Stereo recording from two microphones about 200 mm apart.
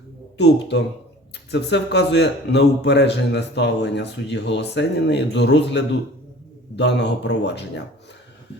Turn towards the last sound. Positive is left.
turn(degrees=60)  # may be behind; listen again after turning